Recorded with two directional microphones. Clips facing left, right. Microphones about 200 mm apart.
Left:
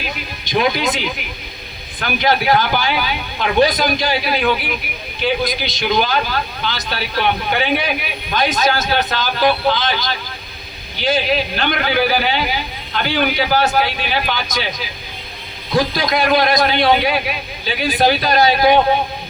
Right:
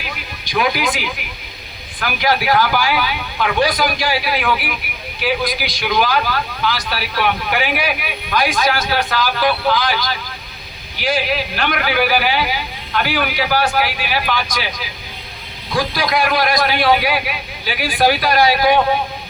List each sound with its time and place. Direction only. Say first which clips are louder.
0.0 s a man's voice: left 3 dB; 25° left (ahead or behind)
15.7 s a man's voice: left 2 dB; 25° left (ahead or behind)